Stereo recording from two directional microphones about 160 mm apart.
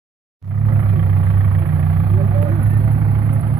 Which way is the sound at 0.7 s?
20° right (ahead or behind).